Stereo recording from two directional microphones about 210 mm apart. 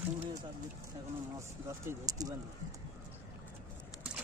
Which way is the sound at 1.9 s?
15° right (ahead or behind).